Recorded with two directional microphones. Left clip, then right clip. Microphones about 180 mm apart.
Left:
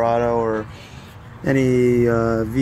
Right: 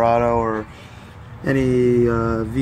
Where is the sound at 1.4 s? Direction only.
5° left (ahead or behind).